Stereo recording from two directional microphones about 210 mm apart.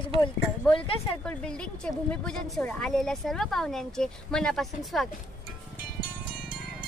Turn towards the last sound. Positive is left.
turn(degrees=0)  # may be behind; listen again after turning